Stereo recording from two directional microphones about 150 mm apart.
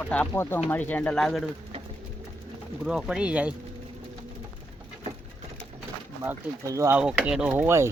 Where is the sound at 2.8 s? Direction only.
5° right (ahead or behind).